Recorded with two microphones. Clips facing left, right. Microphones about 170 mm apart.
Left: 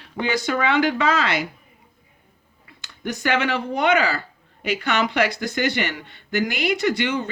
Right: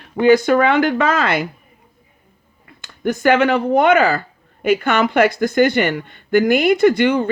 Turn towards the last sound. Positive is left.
turn(degrees=-55)  # may be behind; listen again after turning